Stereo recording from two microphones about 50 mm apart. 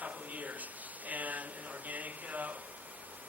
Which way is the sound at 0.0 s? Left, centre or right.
Right.